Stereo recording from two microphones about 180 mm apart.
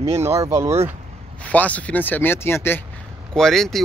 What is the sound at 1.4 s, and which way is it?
Speech, 10° left (ahead or behind).